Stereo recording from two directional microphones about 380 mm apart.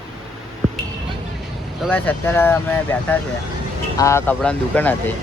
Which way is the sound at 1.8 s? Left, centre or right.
Centre.